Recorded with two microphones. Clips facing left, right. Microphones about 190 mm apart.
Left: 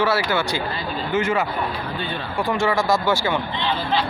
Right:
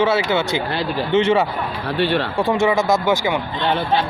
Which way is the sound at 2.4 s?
20° right (ahead or behind).